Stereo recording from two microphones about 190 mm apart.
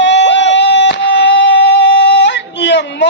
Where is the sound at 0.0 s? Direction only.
70° left (ahead or behind).